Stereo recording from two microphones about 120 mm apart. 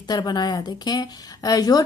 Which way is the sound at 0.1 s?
35° left (ahead or behind).